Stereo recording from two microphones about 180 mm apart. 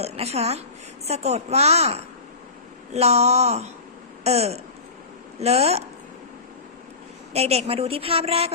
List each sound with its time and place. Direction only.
0.0 s a woman's voice: 35° right (ahead or behind)
7.3 s a woman's voice: 35° right (ahead or behind)